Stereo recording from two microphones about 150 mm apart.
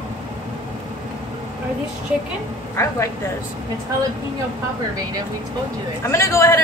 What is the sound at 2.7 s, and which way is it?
Speech, 20° left (ahead or behind).